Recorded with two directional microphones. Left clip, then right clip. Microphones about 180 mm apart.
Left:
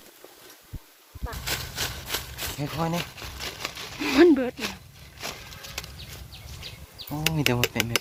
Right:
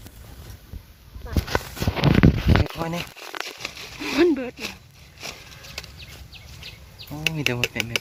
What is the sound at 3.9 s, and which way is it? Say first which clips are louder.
Speech: left 2 dB; 45° left (ahead or behind).